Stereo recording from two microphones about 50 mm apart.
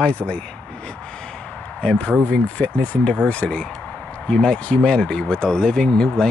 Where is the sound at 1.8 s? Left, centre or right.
Centre.